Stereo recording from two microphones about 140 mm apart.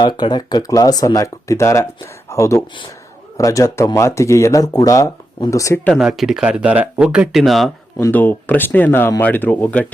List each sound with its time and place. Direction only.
0.0 s speech: 30° left (ahead or behind)
5.8 s speech: centre (ahead or behind)
7.9 s speech: 15° left (ahead or behind)